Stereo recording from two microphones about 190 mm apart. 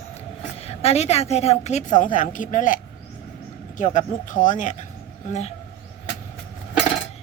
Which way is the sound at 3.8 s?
40° left (ahead or behind).